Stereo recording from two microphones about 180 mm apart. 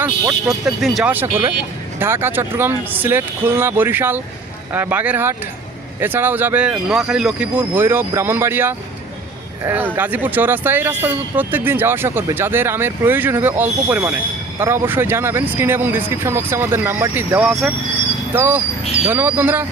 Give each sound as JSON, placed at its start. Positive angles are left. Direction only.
{"t": 0.0, "sound": "speech", "side_deg": -15}
{"t": 0.6, "sound": "speech", "side_deg": 0}